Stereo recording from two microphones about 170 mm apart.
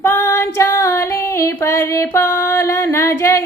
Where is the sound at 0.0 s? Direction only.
15° left (ahead or behind).